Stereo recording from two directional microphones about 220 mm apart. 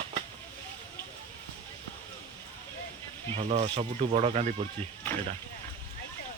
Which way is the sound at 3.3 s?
25° right (ahead or behind).